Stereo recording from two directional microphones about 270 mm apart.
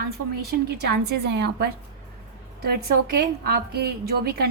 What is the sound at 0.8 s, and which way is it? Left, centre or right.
Speech, right.